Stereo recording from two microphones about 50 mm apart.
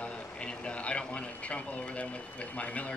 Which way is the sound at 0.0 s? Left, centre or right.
Left.